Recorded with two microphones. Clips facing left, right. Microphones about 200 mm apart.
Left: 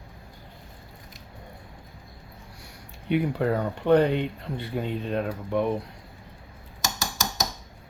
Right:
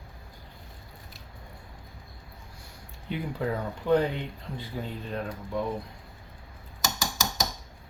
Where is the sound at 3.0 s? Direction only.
65° left (ahead or behind).